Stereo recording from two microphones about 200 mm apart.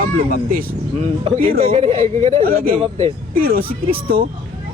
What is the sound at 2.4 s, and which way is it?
Speech, 50° right (ahead or behind).